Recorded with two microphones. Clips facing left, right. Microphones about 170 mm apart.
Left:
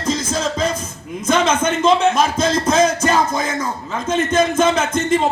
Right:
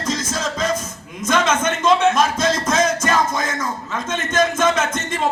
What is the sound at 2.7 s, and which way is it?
Music, 30° left (ahead or behind).